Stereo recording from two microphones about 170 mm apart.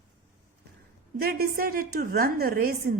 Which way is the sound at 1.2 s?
65° right (ahead or behind).